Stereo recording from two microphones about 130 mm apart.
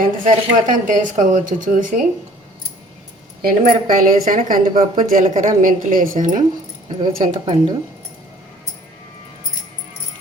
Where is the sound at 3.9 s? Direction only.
90° right.